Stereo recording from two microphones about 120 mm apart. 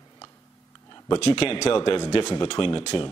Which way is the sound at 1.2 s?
45° left (ahead or behind).